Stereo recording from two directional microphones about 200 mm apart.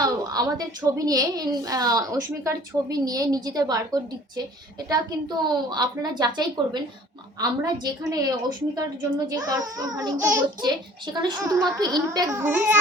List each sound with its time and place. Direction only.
0.0 s a child's voice: 20° right (ahead or behind)
9.3 s a child's voice: 20° right (ahead or behind)